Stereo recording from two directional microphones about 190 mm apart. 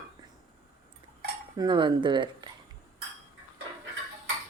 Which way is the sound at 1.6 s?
25° right (ahead or behind).